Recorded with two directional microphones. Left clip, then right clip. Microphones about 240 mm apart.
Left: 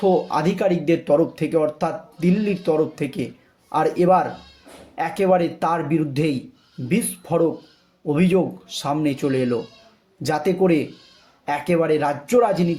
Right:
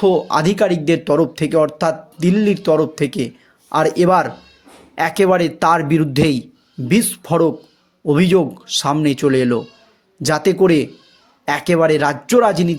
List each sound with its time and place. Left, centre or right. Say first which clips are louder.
0.0 s speech: right 4 dB; right